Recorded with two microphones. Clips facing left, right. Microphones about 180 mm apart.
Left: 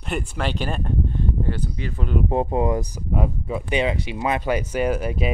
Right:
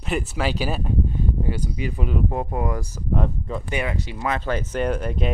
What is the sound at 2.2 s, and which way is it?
Speech, 25° left (ahead or behind).